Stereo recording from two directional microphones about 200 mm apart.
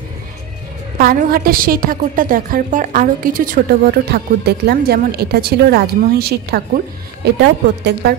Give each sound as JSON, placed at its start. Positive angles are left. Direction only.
{"t": 0.9, "sound": "a woman's voice", "side_deg": -45}